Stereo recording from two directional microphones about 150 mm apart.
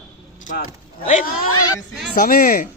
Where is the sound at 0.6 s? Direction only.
55° left (ahead or behind).